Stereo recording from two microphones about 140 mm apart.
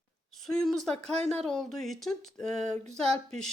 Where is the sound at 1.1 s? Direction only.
45° right (ahead or behind).